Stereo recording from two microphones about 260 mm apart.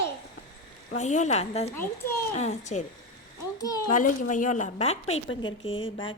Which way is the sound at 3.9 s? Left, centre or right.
Left.